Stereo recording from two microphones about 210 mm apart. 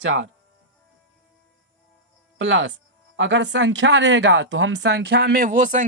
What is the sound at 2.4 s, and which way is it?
Speech, 65° right (ahead or behind).